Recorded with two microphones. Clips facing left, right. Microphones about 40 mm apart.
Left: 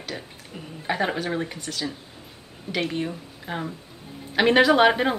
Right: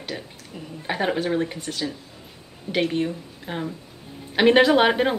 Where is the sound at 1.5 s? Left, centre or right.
Centre.